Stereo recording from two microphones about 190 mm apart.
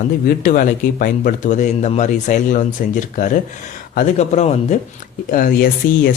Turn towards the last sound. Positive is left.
turn(degrees=50)  # may be behind; listen again after turning